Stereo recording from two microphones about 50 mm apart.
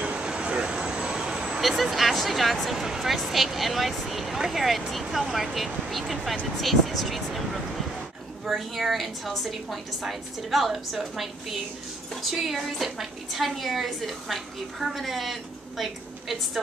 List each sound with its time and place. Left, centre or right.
0.0 s vehicle: centre
1.6 s speech: centre